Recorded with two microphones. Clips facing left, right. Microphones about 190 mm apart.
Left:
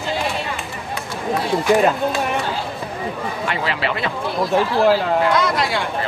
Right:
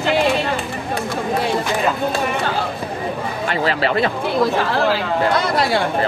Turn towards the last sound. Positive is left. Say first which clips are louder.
# right 2 dB
turn(degrees=-30)  # may be behind; listen again after turning